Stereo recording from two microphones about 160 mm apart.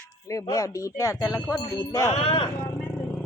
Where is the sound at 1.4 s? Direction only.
5° left (ahead or behind).